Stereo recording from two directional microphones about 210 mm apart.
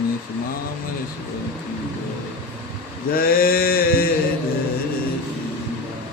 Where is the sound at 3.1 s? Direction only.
45° left (ahead or behind).